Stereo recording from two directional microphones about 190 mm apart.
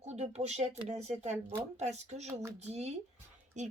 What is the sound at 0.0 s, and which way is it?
Speech, 35° right (ahead or behind).